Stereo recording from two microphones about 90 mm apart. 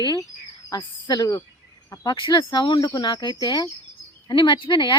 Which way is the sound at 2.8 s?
55° left (ahead or behind).